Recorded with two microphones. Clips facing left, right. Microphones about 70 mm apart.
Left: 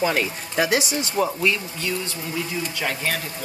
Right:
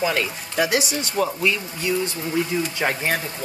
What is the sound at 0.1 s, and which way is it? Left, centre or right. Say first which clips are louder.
Speech: even; centre.